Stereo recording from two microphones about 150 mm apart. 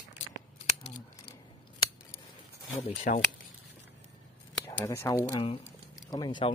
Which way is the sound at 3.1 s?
60° left (ahead or behind).